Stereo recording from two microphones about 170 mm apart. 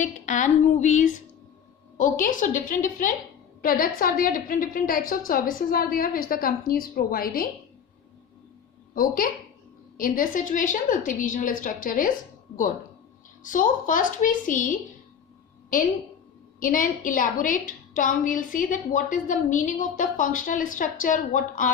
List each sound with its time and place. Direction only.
0.0 s a woman's voice: 45° left (ahead or behind)
9.0 s a woman's voice: 55° left (ahead or behind)
13.4 s a woman's voice: 50° left (ahead or behind)
16.6 s a woman's voice: 55° left (ahead or behind)